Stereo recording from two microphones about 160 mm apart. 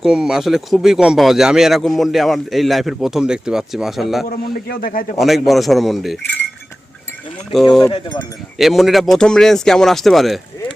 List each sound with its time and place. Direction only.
0.0 s speech: 5° right (ahead or behind)
4.3 s a man's voice: 65° left (ahead or behind)
5.2 s speech: centre (ahead or behind)
7.5 s speech: centre (ahead or behind)
7.9 s speech: 25° left (ahead or behind)
8.5 s speech: centre (ahead or behind)